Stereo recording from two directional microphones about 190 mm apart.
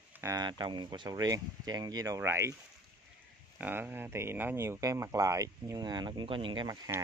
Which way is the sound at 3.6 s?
10° right (ahead or behind).